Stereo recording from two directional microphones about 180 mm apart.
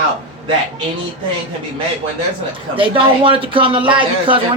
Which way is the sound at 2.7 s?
30° right (ahead or behind).